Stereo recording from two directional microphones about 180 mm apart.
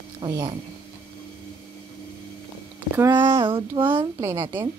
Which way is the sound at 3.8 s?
15° right (ahead or behind).